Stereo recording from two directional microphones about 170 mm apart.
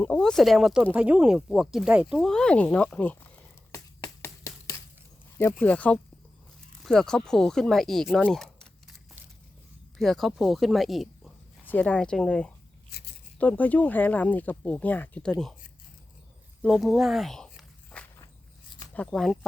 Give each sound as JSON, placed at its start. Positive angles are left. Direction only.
{"t": 0.0, "sound": "speech", "side_deg": 5}
{"t": 4.2, "sound": "a sound", "side_deg": 15}
{"t": 5.4, "sound": "speech", "side_deg": 10}
{"t": 10.0, "sound": "speech", "side_deg": 0}
{"t": 12.9, "sound": "a sound", "side_deg": 75}
{"t": 13.4, "sound": "speech", "side_deg": 10}
{"t": 16.6, "sound": "walk", "side_deg": 0}
{"t": 18.9, "sound": "speech", "side_deg": 5}